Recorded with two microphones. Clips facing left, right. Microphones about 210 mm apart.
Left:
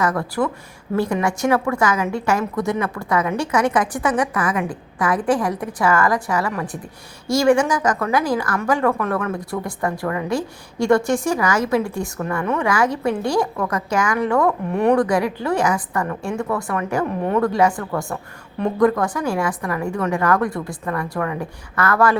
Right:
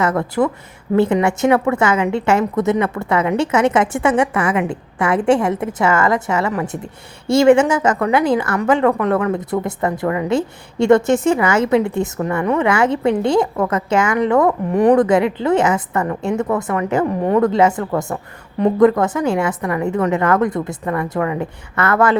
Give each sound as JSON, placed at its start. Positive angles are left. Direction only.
{"t": 0.0, "sound": "a woman's voice", "side_deg": -25}